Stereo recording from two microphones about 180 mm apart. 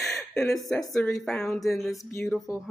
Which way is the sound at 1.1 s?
Centre (ahead or behind).